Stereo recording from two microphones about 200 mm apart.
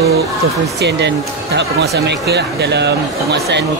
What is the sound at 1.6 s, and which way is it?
Speech, 60° right (ahead or behind).